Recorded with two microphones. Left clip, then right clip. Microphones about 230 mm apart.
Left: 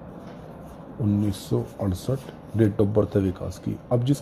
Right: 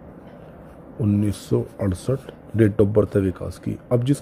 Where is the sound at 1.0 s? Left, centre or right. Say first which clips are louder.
Right 3 dB; right.